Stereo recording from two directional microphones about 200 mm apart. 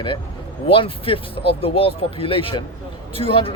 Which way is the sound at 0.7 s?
25° left (ahead or behind).